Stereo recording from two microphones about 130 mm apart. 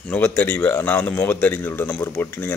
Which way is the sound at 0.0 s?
10° left (ahead or behind).